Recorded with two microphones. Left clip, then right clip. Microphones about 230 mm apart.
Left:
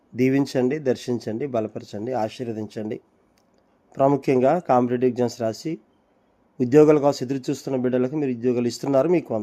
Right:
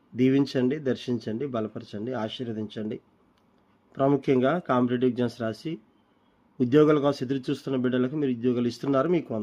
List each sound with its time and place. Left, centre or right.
0.2 s speech: centre